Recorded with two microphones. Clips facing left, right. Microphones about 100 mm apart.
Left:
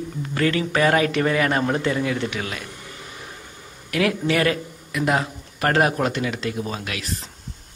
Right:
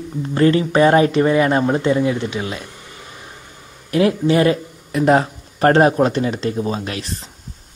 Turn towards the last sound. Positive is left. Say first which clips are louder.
# right 4 dB
turn(degrees=-35)  # may be behind; listen again after turning